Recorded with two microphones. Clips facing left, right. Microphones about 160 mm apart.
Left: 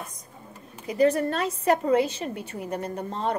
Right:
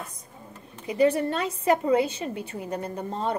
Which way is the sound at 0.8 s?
35° left (ahead or behind).